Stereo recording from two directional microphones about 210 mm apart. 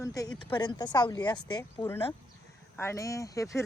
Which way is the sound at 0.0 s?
15° left (ahead or behind).